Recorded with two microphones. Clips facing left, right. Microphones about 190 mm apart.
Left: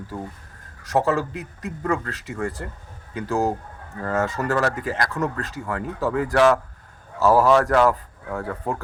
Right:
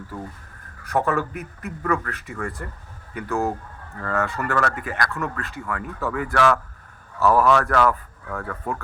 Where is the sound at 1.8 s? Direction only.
25° left (ahead or behind).